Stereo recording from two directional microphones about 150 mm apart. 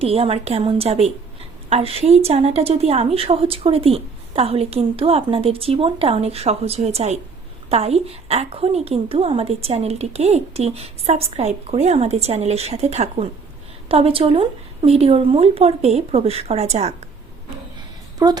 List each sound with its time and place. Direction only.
0.0 s a woman's voice: 40° right (ahead or behind)
18.2 s speech: 25° right (ahead or behind)